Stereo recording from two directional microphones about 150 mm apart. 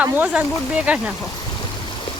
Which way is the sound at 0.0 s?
10° right (ahead or behind).